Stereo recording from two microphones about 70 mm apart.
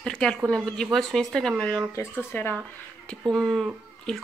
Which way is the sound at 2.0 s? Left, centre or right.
Left.